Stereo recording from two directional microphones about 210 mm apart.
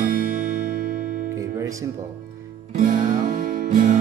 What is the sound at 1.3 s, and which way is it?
Music, 15° right (ahead or behind).